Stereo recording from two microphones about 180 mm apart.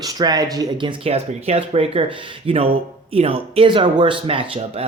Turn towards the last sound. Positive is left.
turn(degrees=-30)  # may be behind; listen again after turning